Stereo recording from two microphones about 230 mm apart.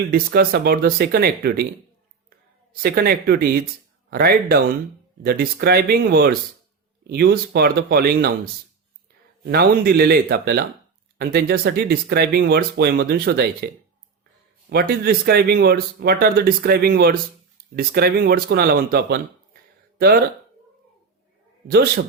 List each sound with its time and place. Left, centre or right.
0.1 s speech: right
2.8 s speech: right
9.5 s speech: right
14.7 s speech: right
21.7 s speech: right